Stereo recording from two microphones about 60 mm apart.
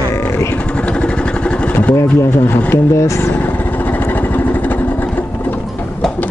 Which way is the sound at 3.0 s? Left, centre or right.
Left.